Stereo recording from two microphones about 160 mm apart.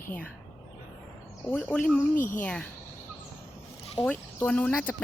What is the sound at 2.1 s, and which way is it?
Speech, 55° left (ahead or behind).